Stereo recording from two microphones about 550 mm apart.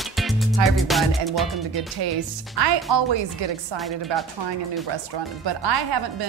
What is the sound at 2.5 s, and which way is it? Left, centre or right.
Speech, right.